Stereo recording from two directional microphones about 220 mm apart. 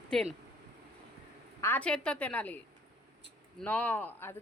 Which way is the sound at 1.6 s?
5° left (ahead or behind).